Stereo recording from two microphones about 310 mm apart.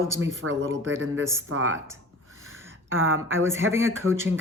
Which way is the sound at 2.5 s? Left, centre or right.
Right.